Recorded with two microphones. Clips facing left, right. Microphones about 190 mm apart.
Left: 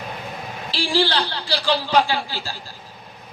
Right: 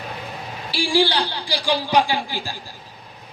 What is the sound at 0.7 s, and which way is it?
A man's voice, 10° right (ahead or behind).